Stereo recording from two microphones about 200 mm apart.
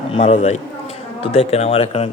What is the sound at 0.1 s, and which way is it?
A man's voice, 30° left (ahead or behind).